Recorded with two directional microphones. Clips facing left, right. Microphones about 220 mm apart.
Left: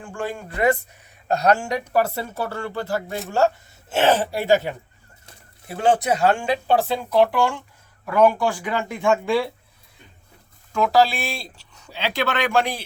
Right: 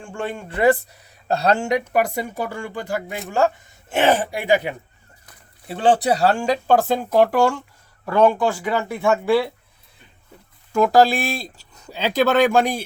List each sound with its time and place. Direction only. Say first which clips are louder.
0.0 s speech: right 1 dB; 25° right (ahead or behind)
5.6 s speech: right 2 dB; 30° right (ahead or behind); by 7.6 s 45° right (ahead or behind)
8.1 s speech: right 1 dB; 25° right (ahead or behind)
8.4 s speech: right 2 dB; 15° left (ahead or behind)
10.8 s speech: right 3 dB; 50° right (ahead or behind)